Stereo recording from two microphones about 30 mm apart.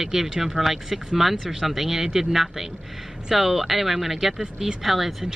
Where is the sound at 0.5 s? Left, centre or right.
Centre.